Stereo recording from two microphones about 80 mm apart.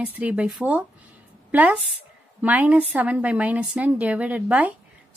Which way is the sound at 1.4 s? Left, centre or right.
Centre.